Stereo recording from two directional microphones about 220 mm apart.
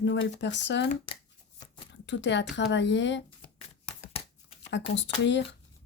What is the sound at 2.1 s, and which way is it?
Speech, 55° left (ahead or behind).